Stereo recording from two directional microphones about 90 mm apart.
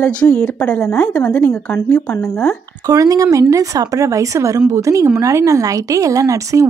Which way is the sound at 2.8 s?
40° right (ahead or behind).